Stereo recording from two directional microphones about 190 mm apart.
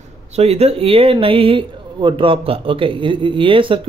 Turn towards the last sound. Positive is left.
turn(degrees=-25)  # may be behind; listen again after turning